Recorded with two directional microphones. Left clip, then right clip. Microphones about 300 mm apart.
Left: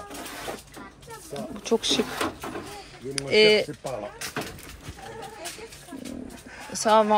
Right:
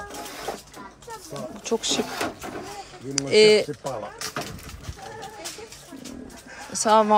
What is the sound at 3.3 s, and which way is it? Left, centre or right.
Speech, centre.